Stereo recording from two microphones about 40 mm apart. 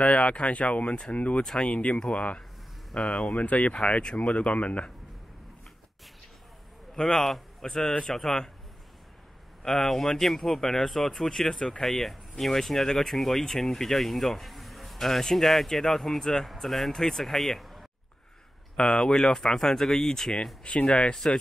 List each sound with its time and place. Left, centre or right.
0.0 s speech: left
3.3 s speech: left
4.0 s speech: left
7.0 s speech: centre
9.6 s speech: centre
18.8 s speech: centre
20.6 s speech: left
21.1 s speech: centre